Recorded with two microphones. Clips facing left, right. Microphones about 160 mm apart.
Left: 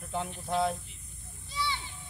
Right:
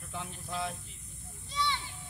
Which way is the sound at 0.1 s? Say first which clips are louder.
Left 8 dB; 55° left (ahead or behind).